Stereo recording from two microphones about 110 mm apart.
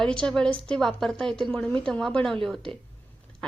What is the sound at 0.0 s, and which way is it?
A woman's voice, 5° left (ahead or behind).